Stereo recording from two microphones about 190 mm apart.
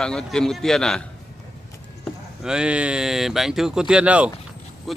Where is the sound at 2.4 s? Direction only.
5° right (ahead or behind).